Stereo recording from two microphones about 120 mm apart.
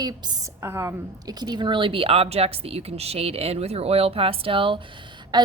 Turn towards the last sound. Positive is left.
turn(degrees=-35)  # may be behind; listen again after turning